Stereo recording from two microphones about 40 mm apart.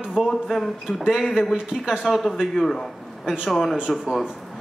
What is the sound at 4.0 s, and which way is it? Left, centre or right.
Speech, centre.